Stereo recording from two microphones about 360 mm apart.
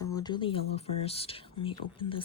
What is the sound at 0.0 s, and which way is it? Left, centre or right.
Speech, centre.